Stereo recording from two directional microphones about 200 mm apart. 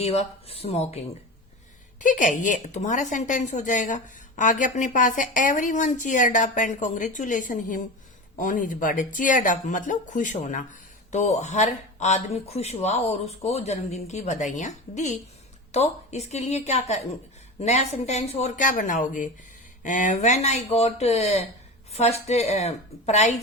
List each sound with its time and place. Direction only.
0.0 s a woman's voice: 30° left (ahead or behind)